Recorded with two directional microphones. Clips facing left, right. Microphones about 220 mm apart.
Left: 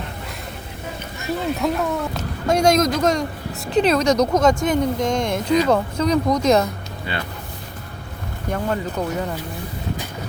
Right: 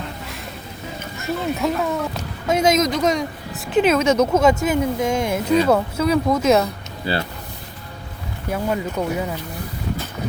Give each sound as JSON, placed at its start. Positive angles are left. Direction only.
{"t": 1.5, "sound": "speech", "side_deg": 0}
{"t": 7.1, "sound": "speech", "side_deg": -35}
{"t": 8.4, "sound": "speech", "side_deg": -10}